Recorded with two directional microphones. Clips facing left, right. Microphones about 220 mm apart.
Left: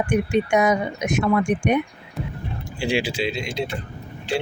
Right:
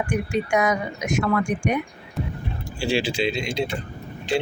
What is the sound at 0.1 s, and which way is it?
Speech, 20° left (ahead or behind).